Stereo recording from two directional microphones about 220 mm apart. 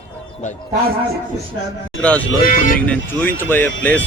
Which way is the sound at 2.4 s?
40° left (ahead or behind).